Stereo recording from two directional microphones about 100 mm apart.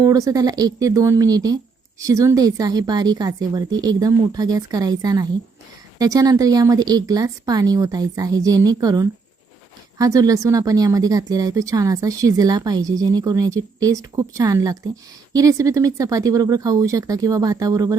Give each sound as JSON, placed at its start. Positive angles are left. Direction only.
{"t": 0.0, "sound": "speech", "side_deg": -35}